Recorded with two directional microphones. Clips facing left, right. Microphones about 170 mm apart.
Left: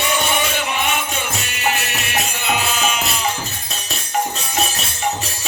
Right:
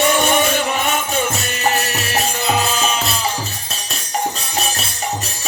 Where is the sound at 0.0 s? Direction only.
45° right (ahead or behind).